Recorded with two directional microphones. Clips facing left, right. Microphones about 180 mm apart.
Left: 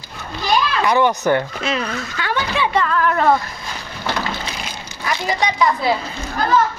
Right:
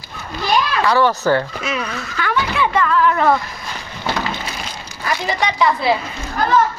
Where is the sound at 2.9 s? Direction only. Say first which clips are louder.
Right 3 dB; 45° left (ahead or behind).